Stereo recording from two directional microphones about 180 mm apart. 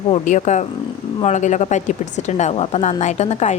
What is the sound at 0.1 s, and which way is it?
A woman's voice, 40° left (ahead or behind).